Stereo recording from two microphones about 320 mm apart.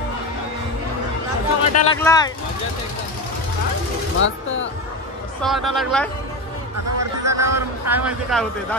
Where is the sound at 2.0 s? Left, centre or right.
Centre.